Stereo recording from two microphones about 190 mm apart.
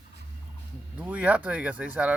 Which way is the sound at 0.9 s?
5° right (ahead or behind).